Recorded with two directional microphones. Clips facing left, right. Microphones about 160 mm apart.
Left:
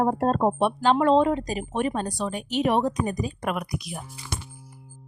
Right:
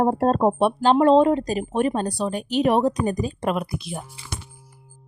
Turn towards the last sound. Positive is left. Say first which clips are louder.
# right 2 dB
turn(degrees=-30)  # may be behind; listen again after turning